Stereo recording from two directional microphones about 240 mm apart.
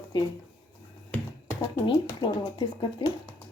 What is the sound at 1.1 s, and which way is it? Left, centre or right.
Finger snapping, centre.